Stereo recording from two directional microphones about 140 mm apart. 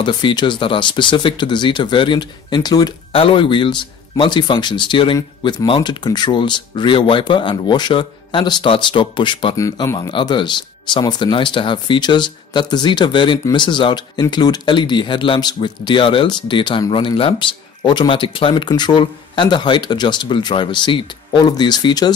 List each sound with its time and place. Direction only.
0.0 s speech: 35° left (ahead or behind)
3.1 s speech: 40° left (ahead or behind)
9.6 s speech: 20° left (ahead or behind)